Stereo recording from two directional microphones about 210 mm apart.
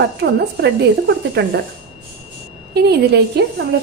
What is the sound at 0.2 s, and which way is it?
Speech, 50° right (ahead or behind).